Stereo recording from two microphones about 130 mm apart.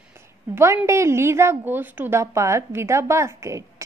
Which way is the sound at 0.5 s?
20° right (ahead or behind).